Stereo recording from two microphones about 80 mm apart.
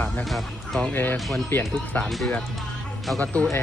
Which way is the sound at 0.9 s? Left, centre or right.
Left.